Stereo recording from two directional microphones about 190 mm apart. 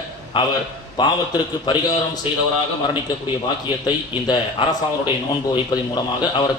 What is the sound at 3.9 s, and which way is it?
A man's voice, 25° left (ahead or behind).